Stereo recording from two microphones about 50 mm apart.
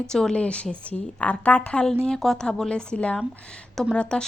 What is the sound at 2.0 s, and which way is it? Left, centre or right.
Speech, centre.